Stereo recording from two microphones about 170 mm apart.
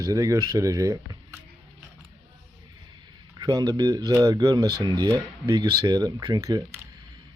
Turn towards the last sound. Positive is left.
turn(degrees=-20)  # may be behind; listen again after turning